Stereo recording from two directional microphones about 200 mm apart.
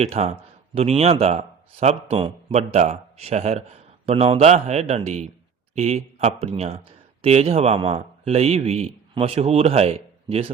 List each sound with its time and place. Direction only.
0.0 s a man's voice: 30° right (ahead or behind)